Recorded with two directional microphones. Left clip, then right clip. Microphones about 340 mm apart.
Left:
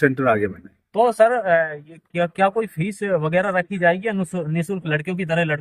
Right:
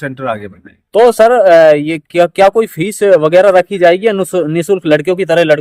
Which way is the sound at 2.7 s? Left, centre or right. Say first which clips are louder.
Right 14 dB; centre.